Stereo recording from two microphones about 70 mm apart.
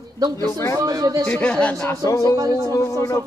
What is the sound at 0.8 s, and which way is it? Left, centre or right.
Speech, right.